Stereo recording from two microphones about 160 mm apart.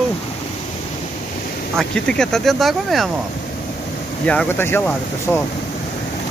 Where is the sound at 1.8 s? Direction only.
5° left (ahead or behind).